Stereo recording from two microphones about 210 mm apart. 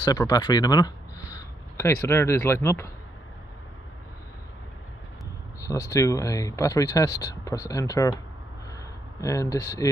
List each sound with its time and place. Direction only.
0.0 s speech: 20° left (ahead or behind)
5.6 s speech: 15° left (ahead or behind)
9.2 s speech: 15° left (ahead or behind)